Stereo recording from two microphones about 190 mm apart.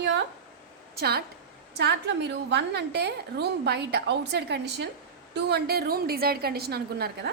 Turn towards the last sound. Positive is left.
turn(degrees=-55)  # may be behind; listen again after turning